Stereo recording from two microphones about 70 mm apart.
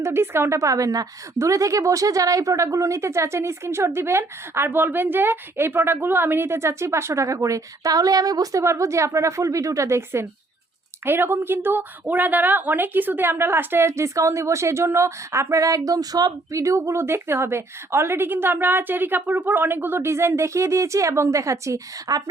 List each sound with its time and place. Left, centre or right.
0.0 s speech: right
0.6 s a woman's voice: right
8.6 s a woman's voice: right